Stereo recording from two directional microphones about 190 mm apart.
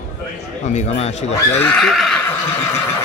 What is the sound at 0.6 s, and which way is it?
Speech, 35° left (ahead or behind).